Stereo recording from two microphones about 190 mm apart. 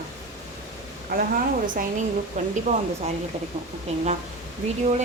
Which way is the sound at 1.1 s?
45° right (ahead or behind).